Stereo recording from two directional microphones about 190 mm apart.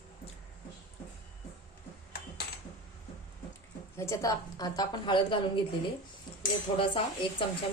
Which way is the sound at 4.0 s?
15° left (ahead or behind).